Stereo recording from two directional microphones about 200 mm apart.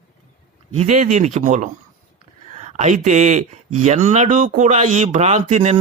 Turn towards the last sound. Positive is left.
turn(degrees=-35)  # may be behind; listen again after turning